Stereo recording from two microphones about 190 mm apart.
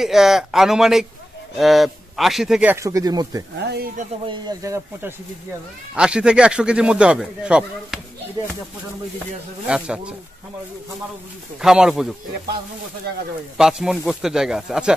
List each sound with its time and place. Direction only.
0.0 s speech: centre (ahead or behind); by 3.4 s 20° right (ahead or behind)
3.5 s speech: 60° right (ahead or behind)
4.3 s speech: 20° right (ahead or behind)
5.9 s speech: 5° right (ahead or behind)
9.7 s speech: 5° right (ahead or behind)
11.6 s speech: 5° right (ahead or behind)
13.6 s speech: 5° right (ahead or behind)